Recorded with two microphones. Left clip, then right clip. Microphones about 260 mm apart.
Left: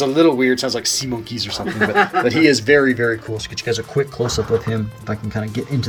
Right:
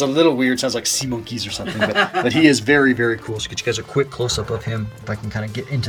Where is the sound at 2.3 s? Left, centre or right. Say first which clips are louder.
Left 1 dB; centre.